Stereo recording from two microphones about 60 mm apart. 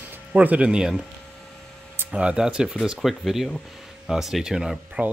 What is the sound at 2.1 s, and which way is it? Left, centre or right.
Speech, centre.